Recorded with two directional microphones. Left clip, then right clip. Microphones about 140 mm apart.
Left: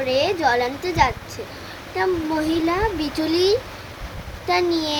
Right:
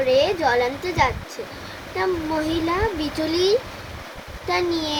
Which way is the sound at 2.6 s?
15° left (ahead or behind).